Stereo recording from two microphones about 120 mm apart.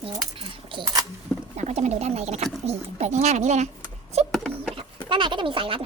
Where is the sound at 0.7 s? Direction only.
45° right (ahead or behind).